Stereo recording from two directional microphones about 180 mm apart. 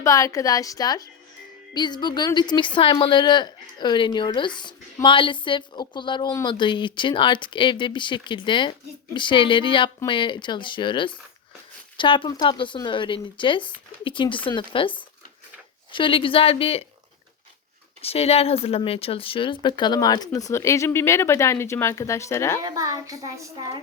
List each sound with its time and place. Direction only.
0.0 s a woman's voice: 15° left (ahead or behind)
18.0 s a woman's voice: 35° left (ahead or behind); by 22.6 s 15° left (ahead or behind)
22.6 s a child's voice: 20° right (ahead or behind)